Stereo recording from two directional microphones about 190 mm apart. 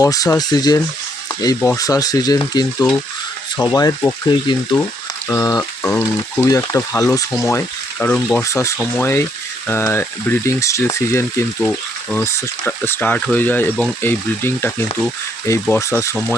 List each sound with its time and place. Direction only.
0.0 s stir: 20° left (ahead or behind)
5.3 s frying: 20° left (ahead or behind)
6.0 s speech: 15° left (ahead or behind)